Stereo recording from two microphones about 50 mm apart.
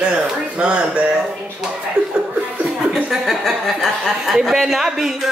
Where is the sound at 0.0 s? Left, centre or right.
Right.